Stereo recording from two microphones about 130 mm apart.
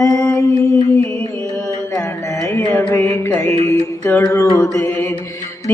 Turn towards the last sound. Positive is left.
turn(degrees=20)  # may be behind; listen again after turning